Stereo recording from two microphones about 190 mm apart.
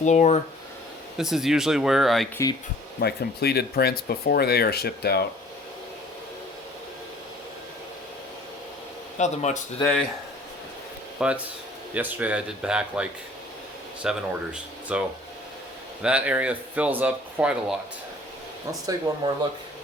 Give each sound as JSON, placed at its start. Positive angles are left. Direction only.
{"t": 0.0, "sound": "speech", "side_deg": 40}
{"t": 1.2, "sound": "speech", "side_deg": 0}
{"t": 3.0, "sound": "speech", "side_deg": 55}
{"t": 9.1, "sound": "speech", "side_deg": 40}
{"t": 11.2, "sound": "speech", "side_deg": -5}
{"t": 18.9, "sound": "speech", "side_deg": -20}